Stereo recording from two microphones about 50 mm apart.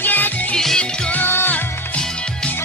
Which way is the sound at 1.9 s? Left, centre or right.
Left.